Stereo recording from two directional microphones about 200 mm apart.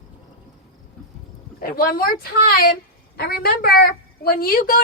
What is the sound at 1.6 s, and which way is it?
A woman's voice, 45° left (ahead or behind).